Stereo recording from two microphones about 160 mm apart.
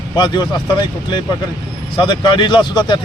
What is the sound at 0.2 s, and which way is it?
A man's voice, 25° left (ahead or behind).